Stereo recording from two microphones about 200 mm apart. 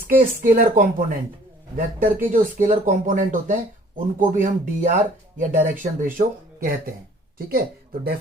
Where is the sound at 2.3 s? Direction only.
40° right (ahead or behind).